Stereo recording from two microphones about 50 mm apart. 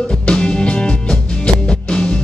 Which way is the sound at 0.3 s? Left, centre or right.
Centre.